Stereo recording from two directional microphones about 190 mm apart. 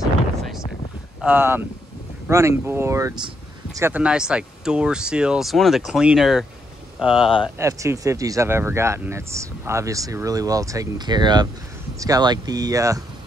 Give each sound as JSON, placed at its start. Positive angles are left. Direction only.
{"t": 0.4, "sound": "a sound", "side_deg": 0}
{"t": 1.2, "sound": "speech", "side_deg": -10}
{"t": 7.5, "sound": "speech", "side_deg": -15}